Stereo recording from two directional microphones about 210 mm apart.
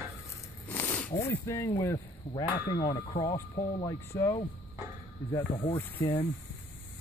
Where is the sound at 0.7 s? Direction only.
10° left (ahead or behind).